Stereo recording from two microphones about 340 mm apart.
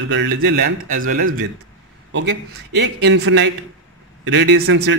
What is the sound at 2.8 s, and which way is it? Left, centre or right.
A man's voice, right.